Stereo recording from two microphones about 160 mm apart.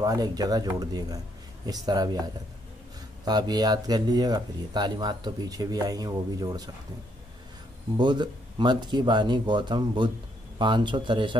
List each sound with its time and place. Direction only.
0.0 s speech: 25° right (ahead or behind)
3.3 s speech: 25° right (ahead or behind)
8.0 s speech: 30° right (ahead or behind)